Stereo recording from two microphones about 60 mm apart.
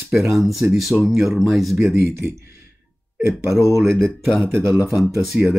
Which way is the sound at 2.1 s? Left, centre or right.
Right.